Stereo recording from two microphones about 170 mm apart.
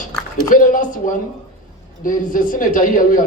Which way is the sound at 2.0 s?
50° left (ahead or behind).